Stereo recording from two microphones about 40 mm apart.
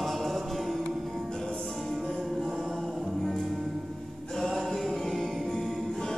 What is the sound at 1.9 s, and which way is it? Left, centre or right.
Music, centre.